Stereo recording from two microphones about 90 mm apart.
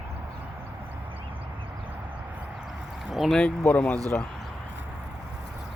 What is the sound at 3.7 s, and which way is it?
Speech, 15° left (ahead or behind).